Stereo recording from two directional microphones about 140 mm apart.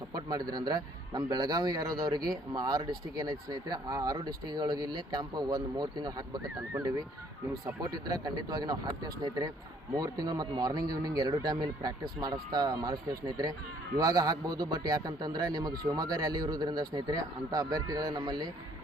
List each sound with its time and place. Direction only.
0.5 s a man's voice: 30° right (ahead or behind)